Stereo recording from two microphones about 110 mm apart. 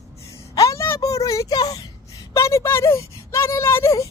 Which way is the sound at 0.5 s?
30° left (ahead or behind).